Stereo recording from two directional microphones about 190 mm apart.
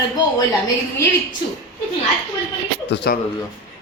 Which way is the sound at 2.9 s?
60° left (ahead or behind).